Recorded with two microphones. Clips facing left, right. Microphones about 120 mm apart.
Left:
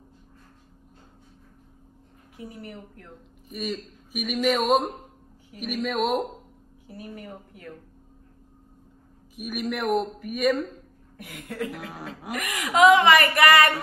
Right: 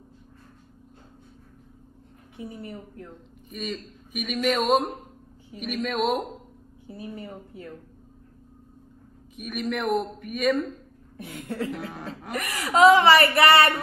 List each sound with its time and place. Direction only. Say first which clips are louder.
2.3 s a woman's voice: right 2 dB; 20° right (ahead or behind)
3.4 s speech: left 2 dB; centre (ahead or behind)
6.9 s a woman's voice: right 2 dB; 25° right (ahead or behind)
9.3 s speech: even; 5° left (ahead or behind)
11.1 s a woman's voice: right 2 dB; 30° right (ahead or behind)
11.9 s speech: right 1 dB; 5° left (ahead or behind)
12.3 s a woman's voice: right 1 dB; 35° right (ahead or behind)